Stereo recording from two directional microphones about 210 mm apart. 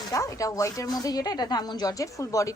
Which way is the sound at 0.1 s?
15° left (ahead or behind).